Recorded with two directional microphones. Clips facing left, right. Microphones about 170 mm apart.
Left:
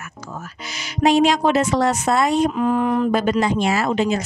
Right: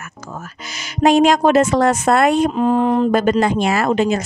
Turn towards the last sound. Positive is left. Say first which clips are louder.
# right 3 dB
turn(degrees=-50)  # may be behind; listen again after turning